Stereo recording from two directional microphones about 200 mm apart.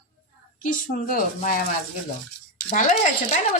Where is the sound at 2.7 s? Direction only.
40° left (ahead or behind).